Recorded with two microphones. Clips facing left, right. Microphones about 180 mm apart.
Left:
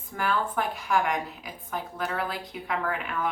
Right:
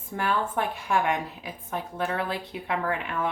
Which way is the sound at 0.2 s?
25° right (ahead or behind).